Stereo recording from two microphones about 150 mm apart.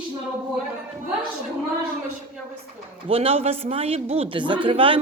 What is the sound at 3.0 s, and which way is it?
Speech, 40° right (ahead or behind).